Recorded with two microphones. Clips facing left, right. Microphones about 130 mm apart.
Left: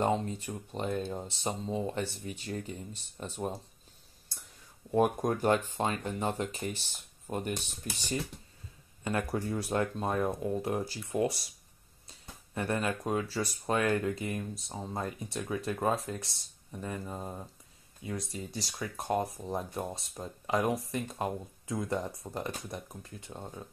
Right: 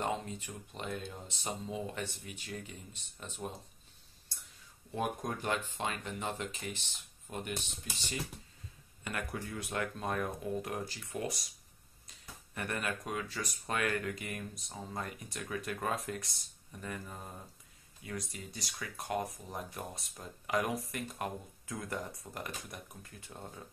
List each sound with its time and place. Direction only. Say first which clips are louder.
0.0 s speech: left 7 dB; 35° left (ahead or behind)
4.9 s speech: left 9 dB; 50° left (ahead or behind)
9.0 s speech: left 8 dB; 30° left (ahead or behind)